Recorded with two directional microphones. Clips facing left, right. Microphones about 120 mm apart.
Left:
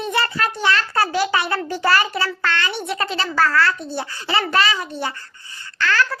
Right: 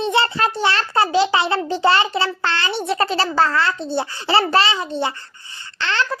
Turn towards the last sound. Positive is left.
turn(degrees=-25)  # may be behind; listen again after turning